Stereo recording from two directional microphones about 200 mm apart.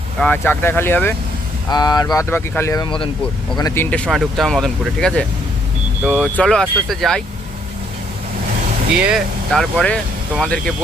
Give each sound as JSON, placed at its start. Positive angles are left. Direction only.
{"t": 0.2, "sound": "speech", "side_deg": 10}
{"t": 3.6, "sound": "speech", "side_deg": 10}
{"t": 6.1, "sound": "speech", "side_deg": -5}
{"t": 6.3, "sound": "speech", "side_deg": 5}
{"t": 9.0, "sound": "speech", "side_deg": -5}